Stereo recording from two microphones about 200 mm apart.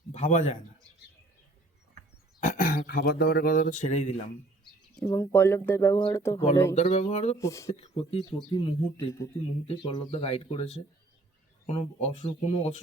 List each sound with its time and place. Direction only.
0.1 s a man's voice: 35° left (ahead or behind)
2.4 s speech: 40° left (ahead or behind)
4.9 s speech: 15° left (ahead or behind)
6.7 s speech: 35° left (ahead or behind)
7.3 s speech: 15° left (ahead or behind)
7.7 s speech: 30° left (ahead or behind)